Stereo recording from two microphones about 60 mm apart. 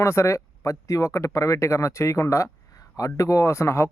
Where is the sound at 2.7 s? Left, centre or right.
Left.